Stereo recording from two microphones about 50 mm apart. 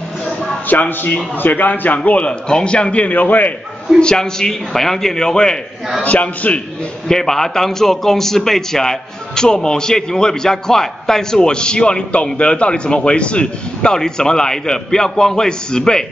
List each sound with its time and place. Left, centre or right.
0.7 s a man's voice: left
2.0 s a man's voice: left
4.0 s a man's voice: centre
6.0 s a man's voice: left
7.1 s a man's voice: centre